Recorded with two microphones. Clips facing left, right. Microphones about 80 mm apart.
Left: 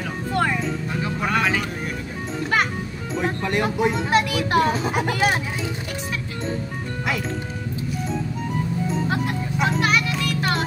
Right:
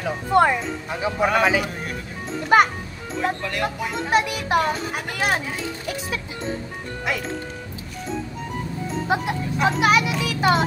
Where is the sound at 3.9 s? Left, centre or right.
Centre.